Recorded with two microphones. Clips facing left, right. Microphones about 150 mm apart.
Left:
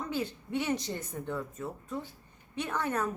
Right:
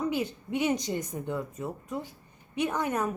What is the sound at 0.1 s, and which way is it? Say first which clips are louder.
A woman's voice: right 3 dB; 15° right (ahead or behind).